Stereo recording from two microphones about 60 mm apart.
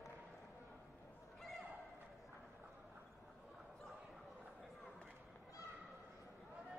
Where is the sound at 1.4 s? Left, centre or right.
Centre.